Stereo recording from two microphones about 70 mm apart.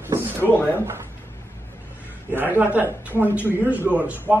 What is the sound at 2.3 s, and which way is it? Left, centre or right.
Speech, right.